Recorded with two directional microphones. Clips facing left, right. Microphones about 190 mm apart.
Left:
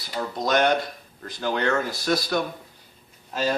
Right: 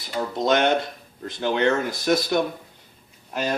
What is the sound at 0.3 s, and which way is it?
Speech, 25° right (ahead or behind).